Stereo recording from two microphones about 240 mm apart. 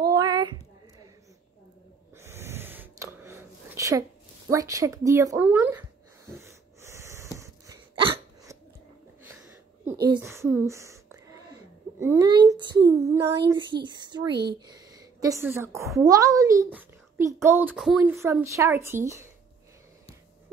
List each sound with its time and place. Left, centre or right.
0.0 s a sound: centre
2.1 s gasp: centre
4.5 s a child's voice: centre
6.4 s hiccup: centre
9.2 s a sound: centre
12.0 s a child's voice: centre